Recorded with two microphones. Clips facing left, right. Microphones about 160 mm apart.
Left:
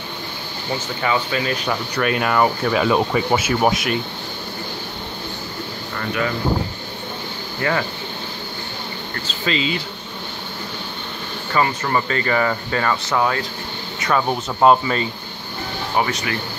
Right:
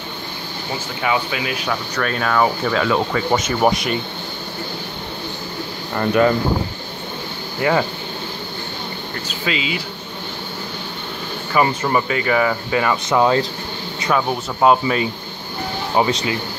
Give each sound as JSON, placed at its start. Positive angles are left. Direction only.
{"t": 1.0, "sound": "speech", "side_deg": -5}
{"t": 2.0, "sound": "speech", "side_deg": 10}
{"t": 3.3, "sound": "speech", "side_deg": 5}
{"t": 5.9, "sound": "speech", "side_deg": -40}
{"t": 7.6, "sound": "speech", "side_deg": -15}
{"t": 9.4, "sound": "speech", "side_deg": -5}
{"t": 11.8, "sound": "speech", "side_deg": -10}
{"t": 16.0, "sound": "speech", "side_deg": -20}